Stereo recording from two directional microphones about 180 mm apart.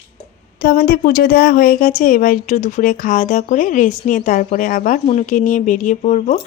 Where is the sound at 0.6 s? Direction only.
55° left (ahead or behind).